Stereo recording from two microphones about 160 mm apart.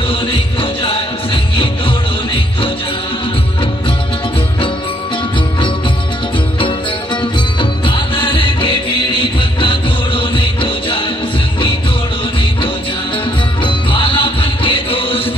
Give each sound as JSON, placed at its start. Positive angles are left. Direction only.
{"t": 0.1, "sound": "music", "side_deg": 35}
{"t": 7.2, "sound": "music", "side_deg": 30}
{"t": 13.7, "sound": "music", "side_deg": 30}